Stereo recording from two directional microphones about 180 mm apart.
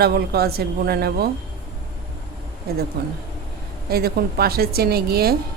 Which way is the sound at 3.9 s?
60° right (ahead or behind).